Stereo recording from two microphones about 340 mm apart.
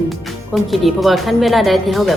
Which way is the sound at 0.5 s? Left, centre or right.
Centre.